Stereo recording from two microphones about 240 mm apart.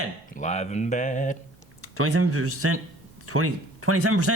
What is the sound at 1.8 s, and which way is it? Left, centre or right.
A man's voice, right.